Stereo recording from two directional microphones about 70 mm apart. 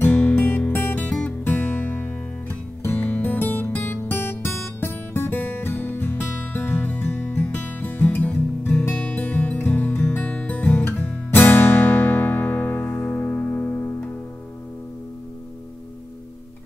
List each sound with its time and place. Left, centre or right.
0.0 s music: left